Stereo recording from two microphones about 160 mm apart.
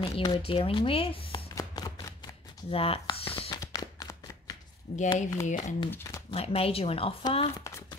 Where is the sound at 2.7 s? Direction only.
35° left (ahead or behind).